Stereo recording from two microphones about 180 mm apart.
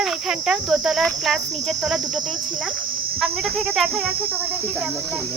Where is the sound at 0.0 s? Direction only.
Centre (ahead or behind).